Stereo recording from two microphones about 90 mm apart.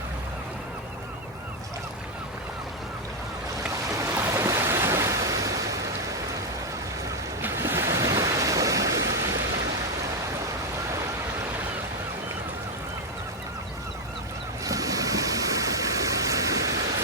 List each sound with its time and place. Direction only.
4.0 s waves: 30° right (ahead or behind)
7.4 s waves: 25° right (ahead or behind)
14.6 s a sound: 40° right (ahead or behind)